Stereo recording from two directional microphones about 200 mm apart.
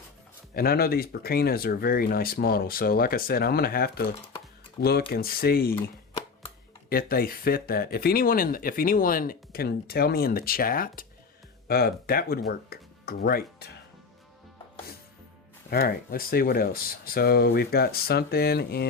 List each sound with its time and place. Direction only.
0.5 s speech: 50° left (ahead or behind)
5.7 s a sound: 25° left (ahead or behind)
6.9 s speech: 50° left (ahead or behind)
15.7 s speech: 45° left (ahead or behind)